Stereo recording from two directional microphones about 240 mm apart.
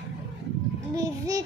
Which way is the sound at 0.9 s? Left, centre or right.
Centre.